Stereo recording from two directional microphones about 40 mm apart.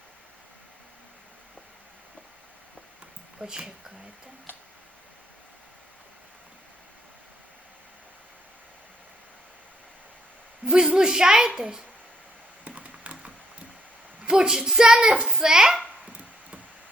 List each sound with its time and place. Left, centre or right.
3.3 s speech: right
10.7 s a woman's voice: centre
12.6 s computer keyboard: right
14.3 s a woman's voice: centre